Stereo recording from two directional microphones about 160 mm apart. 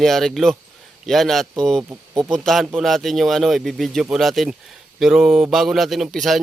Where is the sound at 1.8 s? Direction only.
20° right (ahead or behind).